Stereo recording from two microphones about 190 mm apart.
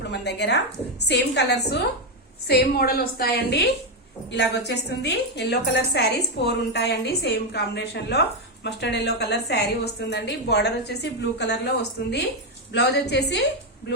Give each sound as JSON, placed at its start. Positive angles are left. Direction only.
{"t": 0.0, "sound": "a woman's voice", "side_deg": 65}